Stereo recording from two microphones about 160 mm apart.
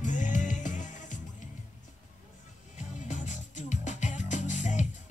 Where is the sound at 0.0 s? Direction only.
50° left (ahead or behind).